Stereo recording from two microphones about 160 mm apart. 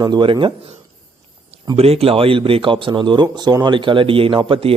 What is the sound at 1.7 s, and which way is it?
Speech, 40° right (ahead or behind).